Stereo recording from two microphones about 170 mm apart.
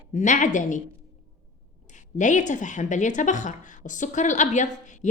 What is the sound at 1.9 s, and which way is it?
Speech, 45° left (ahead or behind).